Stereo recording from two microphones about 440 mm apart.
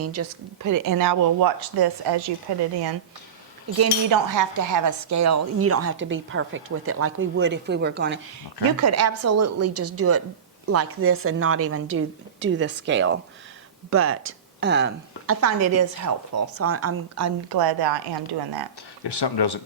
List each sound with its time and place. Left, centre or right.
0.0 s speech: right
3.7 s speech: right
8.7 s a woman's voice: right
17.5 s a woman's voice: right
19.0 s speech: left